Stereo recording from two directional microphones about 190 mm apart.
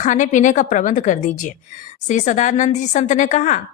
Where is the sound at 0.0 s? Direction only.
40° left (ahead or behind).